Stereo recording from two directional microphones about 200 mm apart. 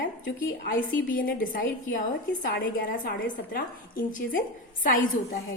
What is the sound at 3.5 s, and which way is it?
A woman's voice, 45° left (ahead or behind).